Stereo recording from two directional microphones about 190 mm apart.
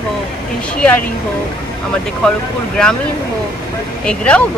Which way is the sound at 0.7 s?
10° left (ahead or behind).